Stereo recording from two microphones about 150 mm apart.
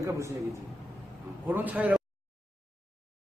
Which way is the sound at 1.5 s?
10° right (ahead or behind).